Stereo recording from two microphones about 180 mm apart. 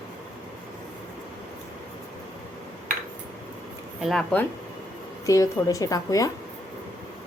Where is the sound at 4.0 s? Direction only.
Centre (ahead or behind).